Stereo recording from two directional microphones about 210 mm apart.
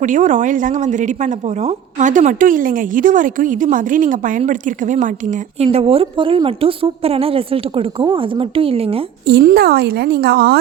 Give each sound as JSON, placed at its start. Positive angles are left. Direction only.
{"t": 0.0, "sound": "a woman's voice", "side_deg": -35}
{"t": 9.2, "sound": "speech", "side_deg": -45}